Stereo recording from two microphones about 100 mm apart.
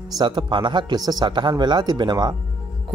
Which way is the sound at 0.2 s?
50° right (ahead or behind).